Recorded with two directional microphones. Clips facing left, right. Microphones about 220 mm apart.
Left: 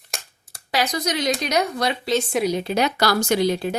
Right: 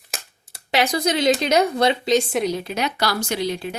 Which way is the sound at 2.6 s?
35° left (ahead or behind).